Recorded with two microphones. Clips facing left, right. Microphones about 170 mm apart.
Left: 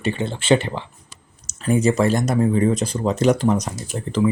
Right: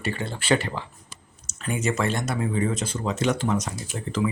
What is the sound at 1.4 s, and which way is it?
Speech, 35° left (ahead or behind).